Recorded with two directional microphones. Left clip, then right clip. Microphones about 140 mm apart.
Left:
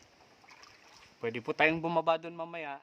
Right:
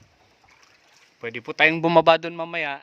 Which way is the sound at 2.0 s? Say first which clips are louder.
Right 13 dB; 60° right (ahead or behind).